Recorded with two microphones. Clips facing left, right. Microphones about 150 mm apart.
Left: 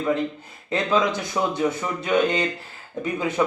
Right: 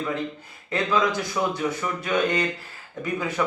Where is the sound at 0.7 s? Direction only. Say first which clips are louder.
Left 2 dB; 25° left (ahead or behind).